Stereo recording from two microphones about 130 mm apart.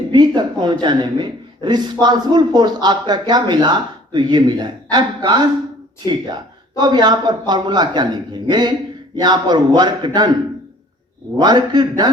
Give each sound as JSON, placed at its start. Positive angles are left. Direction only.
{"t": 0.1, "sound": "a man's voice", "side_deg": -35}
{"t": 6.7, "sound": "a man's voice", "side_deg": -35}
{"t": 11.3, "sound": "a man's voice", "side_deg": -35}